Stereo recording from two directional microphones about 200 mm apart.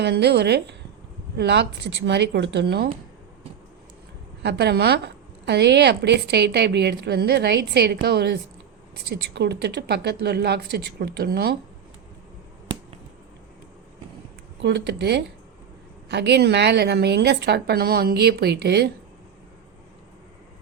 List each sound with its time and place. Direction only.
0.0 s a woman's voice: 55° right (ahead or behind)
4.4 s a woman's voice: 55° right (ahead or behind)
14.6 s a woman's voice: 60° right (ahead or behind)